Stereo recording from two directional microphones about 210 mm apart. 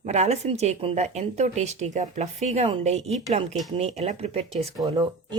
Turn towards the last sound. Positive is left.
turn(degrees=-20)  # may be behind; listen again after turning